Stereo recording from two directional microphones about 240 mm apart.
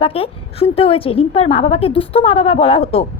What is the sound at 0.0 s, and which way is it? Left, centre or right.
A woman's voice, left.